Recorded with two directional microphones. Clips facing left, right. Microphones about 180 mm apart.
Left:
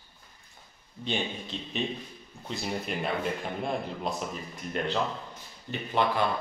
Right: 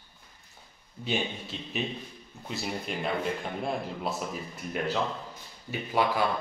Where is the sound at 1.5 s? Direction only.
5° right (ahead or behind).